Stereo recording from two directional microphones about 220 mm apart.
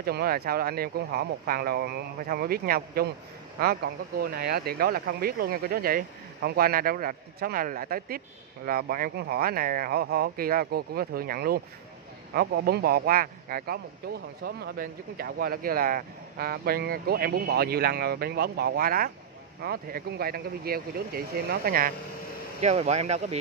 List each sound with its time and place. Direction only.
0.0 s speech: 45° right (ahead or behind)
22.6 s speech: 30° right (ahead or behind)